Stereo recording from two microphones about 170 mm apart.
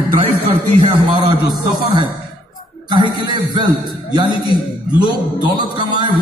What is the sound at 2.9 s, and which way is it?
A man's voice, 25° right (ahead or behind).